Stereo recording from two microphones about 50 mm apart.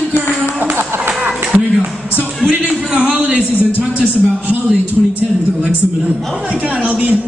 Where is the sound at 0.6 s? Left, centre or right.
Right.